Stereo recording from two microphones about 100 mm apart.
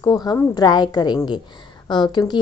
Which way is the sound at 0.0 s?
40° left (ahead or behind).